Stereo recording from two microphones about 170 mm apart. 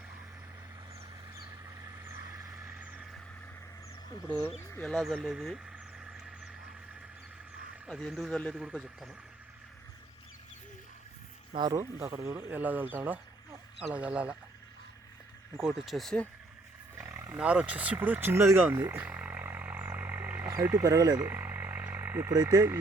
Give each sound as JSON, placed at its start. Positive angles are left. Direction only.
{"t": 1.8, "sound": "vehicle", "side_deg": -20}
{"t": 4.3, "sound": "speech", "side_deg": 10}
{"t": 7.9, "sound": "speech", "side_deg": 0}
{"t": 8.5, "sound": "speech", "side_deg": -5}
{"t": 11.5, "sound": "speech", "side_deg": -25}
{"t": 15.6, "sound": "speech", "side_deg": 0}
{"t": 17.0, "sound": "roaring cats", "side_deg": -15}
{"t": 21.2, "sound": "frog", "side_deg": -10}
{"t": 22.3, "sound": "speech", "side_deg": -25}